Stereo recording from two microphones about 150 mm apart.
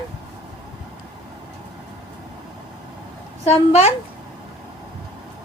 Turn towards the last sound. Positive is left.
turn(degrees=45)  # may be behind; listen again after turning